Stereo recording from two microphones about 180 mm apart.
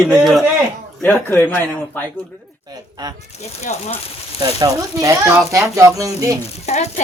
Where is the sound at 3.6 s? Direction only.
40° left (ahead or behind).